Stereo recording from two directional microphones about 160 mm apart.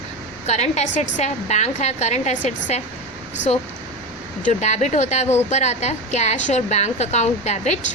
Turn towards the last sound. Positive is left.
turn(degrees=45)  # may be behind; listen again after turning